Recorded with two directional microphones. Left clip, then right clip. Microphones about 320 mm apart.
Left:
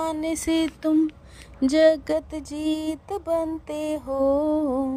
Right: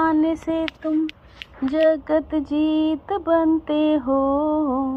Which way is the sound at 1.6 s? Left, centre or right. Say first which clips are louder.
Even; left.